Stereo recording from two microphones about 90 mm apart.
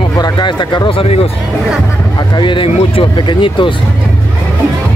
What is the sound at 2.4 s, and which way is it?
Speech, 75° left (ahead or behind).